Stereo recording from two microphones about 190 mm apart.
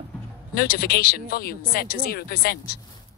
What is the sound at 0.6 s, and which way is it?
Speech, 50° left (ahead or behind).